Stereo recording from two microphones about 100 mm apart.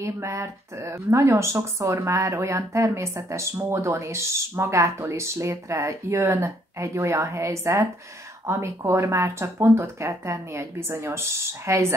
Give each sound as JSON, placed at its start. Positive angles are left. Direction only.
{"t": 0.0, "sound": "speech", "side_deg": -30}